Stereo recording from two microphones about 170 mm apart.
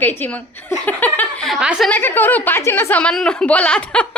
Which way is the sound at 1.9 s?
10° left (ahead or behind).